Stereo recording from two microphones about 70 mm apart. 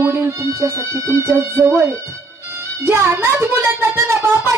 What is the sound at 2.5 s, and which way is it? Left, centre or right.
Music, right.